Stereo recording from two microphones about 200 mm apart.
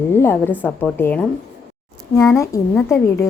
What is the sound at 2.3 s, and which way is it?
Speech, 15° left (ahead or behind).